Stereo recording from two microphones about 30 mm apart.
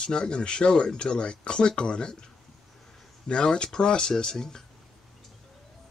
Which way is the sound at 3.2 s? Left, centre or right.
Left.